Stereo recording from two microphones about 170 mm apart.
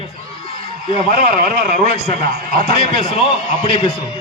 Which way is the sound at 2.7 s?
35° left (ahead or behind).